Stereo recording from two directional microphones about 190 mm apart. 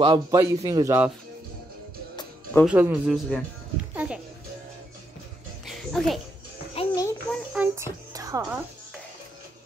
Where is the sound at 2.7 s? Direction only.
5° right (ahead or behind).